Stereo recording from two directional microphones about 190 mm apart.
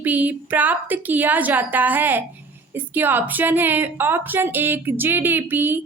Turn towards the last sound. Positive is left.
turn(degrees=-10)  # may be behind; listen again after turning